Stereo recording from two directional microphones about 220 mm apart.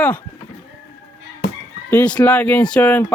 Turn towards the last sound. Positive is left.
turn(degrees=10)  # may be behind; listen again after turning